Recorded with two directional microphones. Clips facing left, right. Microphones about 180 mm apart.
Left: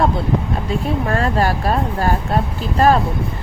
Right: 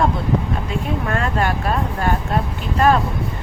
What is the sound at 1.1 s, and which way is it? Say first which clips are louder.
Speech: left 3 dB; 35° left (ahead or behind).